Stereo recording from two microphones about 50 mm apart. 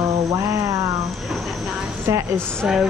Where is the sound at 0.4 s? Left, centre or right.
Right.